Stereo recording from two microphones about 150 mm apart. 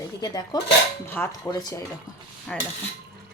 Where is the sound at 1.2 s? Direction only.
10° left (ahead or behind).